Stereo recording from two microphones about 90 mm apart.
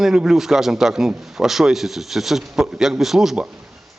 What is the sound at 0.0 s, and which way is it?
A man's voice, 5° right (ahead or behind).